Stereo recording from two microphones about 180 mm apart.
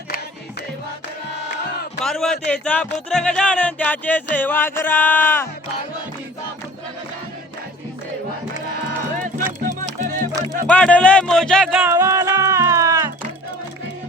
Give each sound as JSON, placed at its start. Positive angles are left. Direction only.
{"t": 2.0, "sound": "speech", "side_deg": 0}
{"t": 9.1, "sound": "music", "side_deg": -45}
{"t": 10.7, "sound": "speech", "side_deg": 5}
{"t": 11.8, "sound": "music", "side_deg": -15}